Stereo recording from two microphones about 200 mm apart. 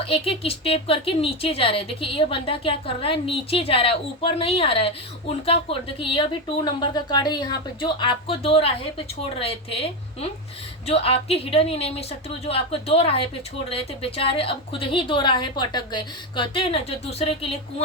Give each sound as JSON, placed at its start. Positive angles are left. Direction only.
{"t": 0.0, "sound": "speech", "side_deg": 30}